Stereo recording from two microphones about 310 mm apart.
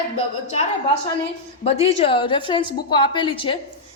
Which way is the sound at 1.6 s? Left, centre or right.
Centre.